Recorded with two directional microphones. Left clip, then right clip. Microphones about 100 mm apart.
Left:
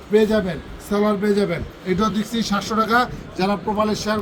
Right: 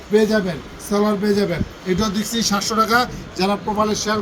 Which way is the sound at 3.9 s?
60° left (ahead or behind).